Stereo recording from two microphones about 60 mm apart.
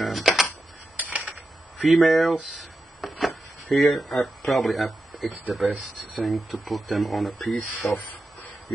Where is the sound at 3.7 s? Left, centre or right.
Centre.